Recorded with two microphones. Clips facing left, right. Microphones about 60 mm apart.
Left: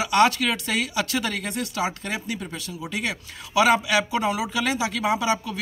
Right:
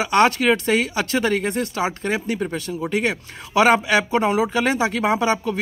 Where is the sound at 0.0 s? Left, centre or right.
Right.